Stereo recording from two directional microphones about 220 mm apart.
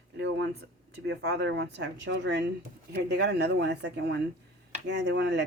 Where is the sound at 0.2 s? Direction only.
55° right (ahead or behind).